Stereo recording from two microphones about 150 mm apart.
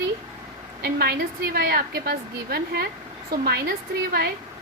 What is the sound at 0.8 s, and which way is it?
A woman's voice, 90° right.